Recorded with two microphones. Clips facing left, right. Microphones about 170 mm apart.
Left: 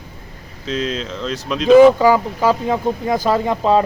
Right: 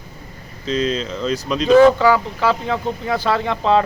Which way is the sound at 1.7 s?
15° left (ahead or behind).